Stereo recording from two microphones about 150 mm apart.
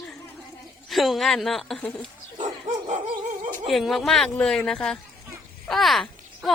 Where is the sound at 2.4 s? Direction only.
55° right (ahead or behind).